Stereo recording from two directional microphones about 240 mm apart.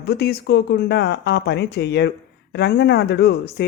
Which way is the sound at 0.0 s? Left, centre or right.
Left.